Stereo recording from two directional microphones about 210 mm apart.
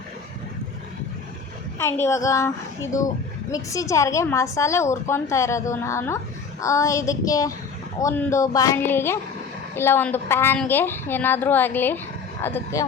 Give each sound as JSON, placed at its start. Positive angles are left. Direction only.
{"t": 1.8, "sound": "a woman's voice", "side_deg": 10}
{"t": 3.5, "sound": "a woman's voice", "side_deg": 15}